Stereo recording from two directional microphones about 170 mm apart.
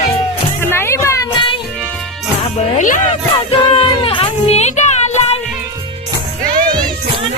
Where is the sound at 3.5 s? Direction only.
35° left (ahead or behind).